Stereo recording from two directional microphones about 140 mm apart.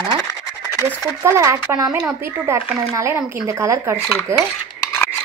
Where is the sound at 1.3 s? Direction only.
20° right (ahead or behind).